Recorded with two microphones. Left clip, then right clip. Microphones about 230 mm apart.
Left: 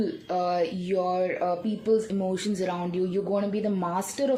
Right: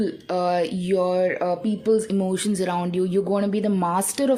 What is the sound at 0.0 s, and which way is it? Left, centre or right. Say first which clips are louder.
Speech: right 4 dB; right.